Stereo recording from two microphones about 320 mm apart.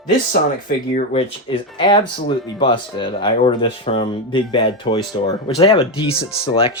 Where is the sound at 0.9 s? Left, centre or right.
Centre.